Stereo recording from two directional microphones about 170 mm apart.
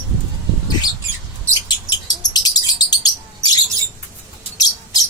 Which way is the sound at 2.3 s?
25° left (ahead or behind).